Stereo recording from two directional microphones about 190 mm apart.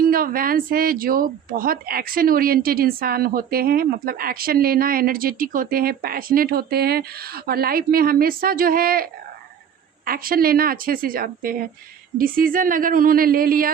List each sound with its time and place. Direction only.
0.0 s speech: 50° right (ahead or behind)
10.1 s speech: 50° right (ahead or behind)